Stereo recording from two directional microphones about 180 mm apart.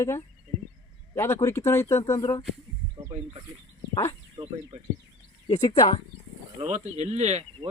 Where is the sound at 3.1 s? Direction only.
35° right (ahead or behind).